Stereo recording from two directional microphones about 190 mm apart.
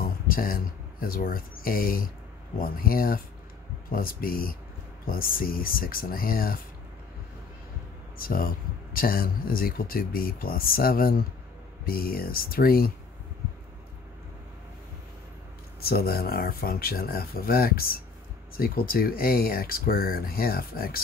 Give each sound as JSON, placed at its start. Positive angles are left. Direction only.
{"t": 0.0, "sound": "a sound", "side_deg": 50}
{"t": 1.0, "sound": "speech", "side_deg": 50}
{"t": 8.2, "sound": "speech", "side_deg": 50}
{"t": 15.8, "sound": "speech", "side_deg": 55}